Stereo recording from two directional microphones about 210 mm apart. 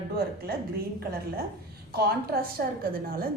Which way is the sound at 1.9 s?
45° right (ahead or behind).